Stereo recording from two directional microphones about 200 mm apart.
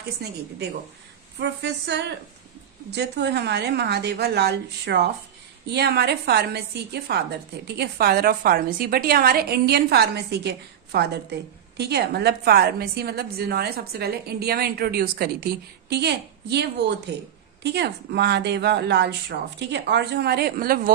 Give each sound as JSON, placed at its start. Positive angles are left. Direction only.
{"t": 1.4, "sound": "a woman's voice", "side_deg": -60}